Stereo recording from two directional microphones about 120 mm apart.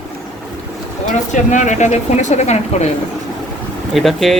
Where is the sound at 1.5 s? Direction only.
85° left; by 2.9 s 70° left (ahead or behind).